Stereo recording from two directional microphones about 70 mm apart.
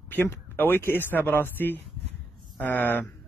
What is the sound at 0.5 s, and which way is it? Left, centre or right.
A man's voice, left.